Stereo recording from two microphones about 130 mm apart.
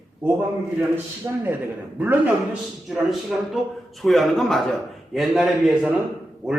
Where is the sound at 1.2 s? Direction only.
25° right (ahead or behind).